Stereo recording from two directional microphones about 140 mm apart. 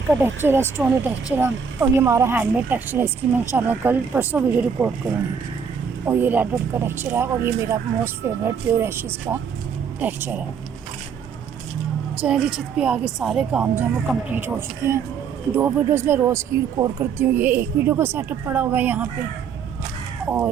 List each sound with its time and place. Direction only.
0.2 s speech: 15° right (ahead or behind)
6.1 s speech: 15° right (ahead or behind)
12.2 s speech: 5° right (ahead or behind)